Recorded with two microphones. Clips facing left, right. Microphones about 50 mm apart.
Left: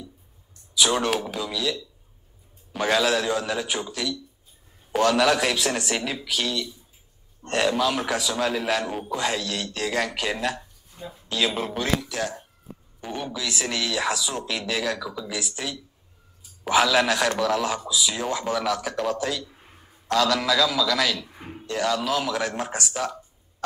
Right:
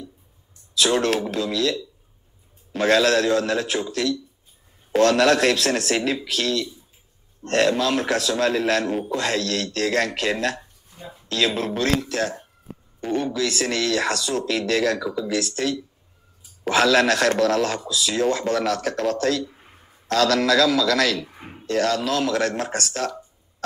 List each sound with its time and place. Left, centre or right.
0.7 s speech: centre
12.1 s speech: right
13.0 s speech: centre